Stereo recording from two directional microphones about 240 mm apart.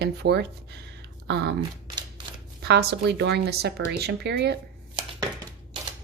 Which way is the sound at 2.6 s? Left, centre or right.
Right.